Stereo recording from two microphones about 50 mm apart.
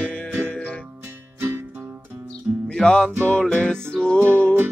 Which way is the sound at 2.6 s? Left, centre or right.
Centre.